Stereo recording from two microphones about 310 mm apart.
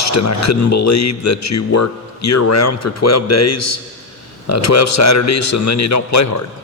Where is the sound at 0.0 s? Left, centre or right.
Left.